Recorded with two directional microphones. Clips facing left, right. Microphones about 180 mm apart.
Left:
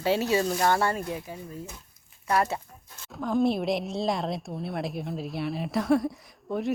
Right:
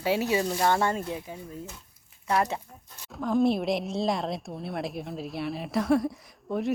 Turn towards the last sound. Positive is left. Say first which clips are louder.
# even
turn(degrees=0)  # may be behind; listen again after turning